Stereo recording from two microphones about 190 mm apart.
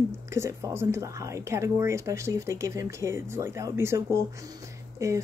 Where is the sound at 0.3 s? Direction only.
15° right (ahead or behind).